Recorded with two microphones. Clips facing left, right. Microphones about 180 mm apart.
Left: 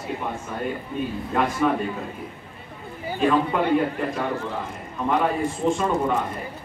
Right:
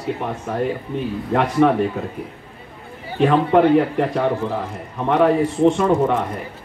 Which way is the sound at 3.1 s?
70° right (ahead or behind).